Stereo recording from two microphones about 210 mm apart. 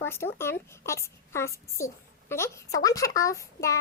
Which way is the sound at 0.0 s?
10° left (ahead or behind).